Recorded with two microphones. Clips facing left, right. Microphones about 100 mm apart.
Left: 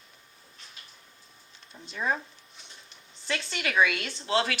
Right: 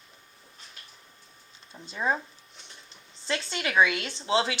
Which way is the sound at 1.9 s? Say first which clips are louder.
Right 2 dB; 25° right (ahead or behind).